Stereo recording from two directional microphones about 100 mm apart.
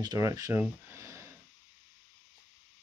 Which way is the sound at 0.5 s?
30° right (ahead or behind).